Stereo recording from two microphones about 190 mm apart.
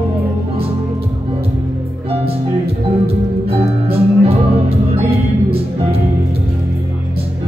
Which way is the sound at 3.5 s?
30° right (ahead or behind).